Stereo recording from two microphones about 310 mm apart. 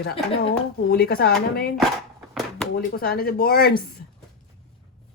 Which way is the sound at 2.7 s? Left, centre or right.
Left.